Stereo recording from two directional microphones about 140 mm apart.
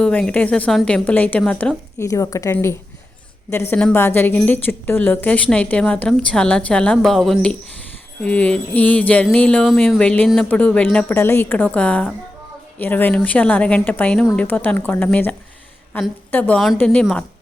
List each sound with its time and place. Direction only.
0.0 s a woman's voice: 10° left (ahead or behind)
2.0 s a woman's voice: 25° left (ahead or behind); by 11.0 s 5° left (ahead or behind)
11.1 s a woman's voice: 20° left (ahead or behind)